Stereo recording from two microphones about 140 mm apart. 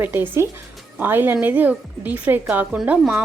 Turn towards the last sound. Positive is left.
turn(degrees=-5)  # may be behind; listen again after turning